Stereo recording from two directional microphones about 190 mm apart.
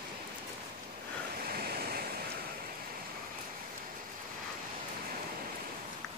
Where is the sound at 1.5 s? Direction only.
55° right (ahead or behind).